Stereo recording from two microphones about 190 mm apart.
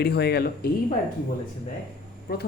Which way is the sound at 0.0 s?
55° left (ahead or behind).